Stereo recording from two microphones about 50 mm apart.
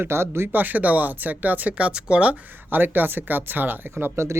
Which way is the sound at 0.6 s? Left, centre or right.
Right.